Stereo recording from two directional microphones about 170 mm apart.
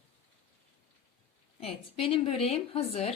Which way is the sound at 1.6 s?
35° left (ahead or behind).